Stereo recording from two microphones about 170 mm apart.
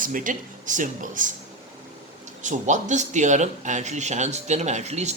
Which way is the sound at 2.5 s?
45° right (ahead or behind).